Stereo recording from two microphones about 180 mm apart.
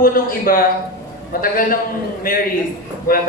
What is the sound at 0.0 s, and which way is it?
A man's voice, 55° left (ahead or behind).